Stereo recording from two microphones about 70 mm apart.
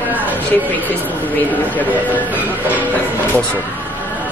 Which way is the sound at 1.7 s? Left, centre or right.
Left.